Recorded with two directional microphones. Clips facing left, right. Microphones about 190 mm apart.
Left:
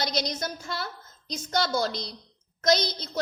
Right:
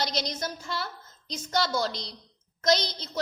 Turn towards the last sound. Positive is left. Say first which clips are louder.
# left 1 dB
turn(degrees=40)  # may be behind; listen again after turning